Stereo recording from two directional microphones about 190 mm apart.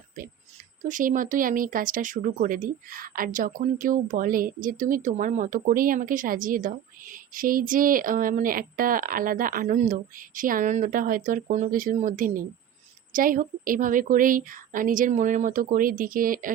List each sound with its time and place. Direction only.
0.8 s speech: 45° right (ahead or behind)